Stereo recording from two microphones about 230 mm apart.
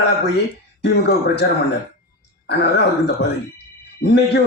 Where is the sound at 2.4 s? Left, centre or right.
Left.